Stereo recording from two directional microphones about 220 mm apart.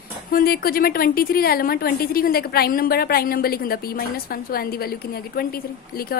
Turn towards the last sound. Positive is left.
turn(degrees=45)  # may be behind; listen again after turning